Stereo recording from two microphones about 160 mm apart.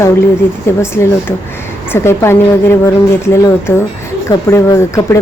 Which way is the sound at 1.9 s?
15° left (ahead or behind).